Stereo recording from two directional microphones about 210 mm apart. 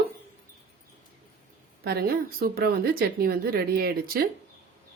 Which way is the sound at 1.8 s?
50° right (ahead or behind).